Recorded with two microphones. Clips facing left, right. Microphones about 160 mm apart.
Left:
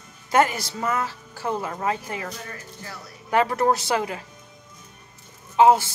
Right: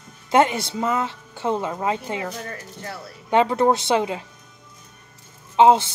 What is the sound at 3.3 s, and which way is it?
Speech, 25° right (ahead or behind).